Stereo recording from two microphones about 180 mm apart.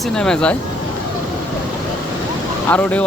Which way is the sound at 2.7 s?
10° left (ahead or behind).